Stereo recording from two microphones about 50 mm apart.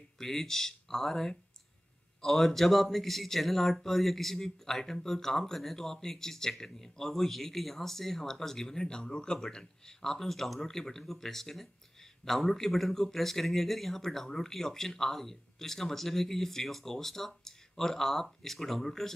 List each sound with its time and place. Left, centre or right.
0.2 s speech: centre